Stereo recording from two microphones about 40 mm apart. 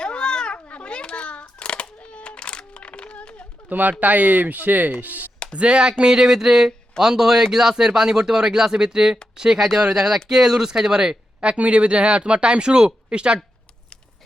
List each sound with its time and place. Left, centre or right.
0.0 s cat: left
3.7 s speech: right
5.5 s speech: right
11.3 s speech: right